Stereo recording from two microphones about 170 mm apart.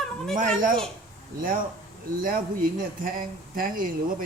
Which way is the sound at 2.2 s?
50° right (ahead or behind).